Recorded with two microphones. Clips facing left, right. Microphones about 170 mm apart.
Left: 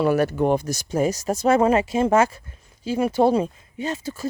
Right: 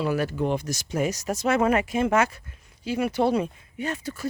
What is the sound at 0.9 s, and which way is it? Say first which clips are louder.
Speech: left 4 dB; 35° left (ahead or behind).